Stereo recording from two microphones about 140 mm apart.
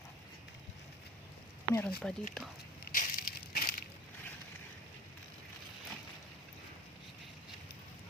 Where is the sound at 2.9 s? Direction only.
90° left.